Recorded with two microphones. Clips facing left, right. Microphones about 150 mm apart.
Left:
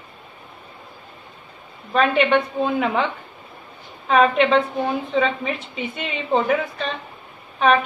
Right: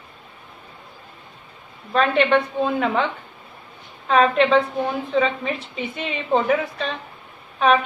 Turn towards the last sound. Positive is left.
turn(degrees=0)  # may be behind; listen again after turning